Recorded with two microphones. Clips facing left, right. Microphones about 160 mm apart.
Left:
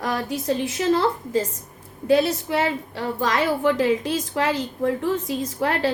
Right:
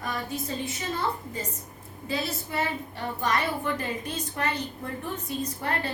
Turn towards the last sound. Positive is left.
turn(degrees=90)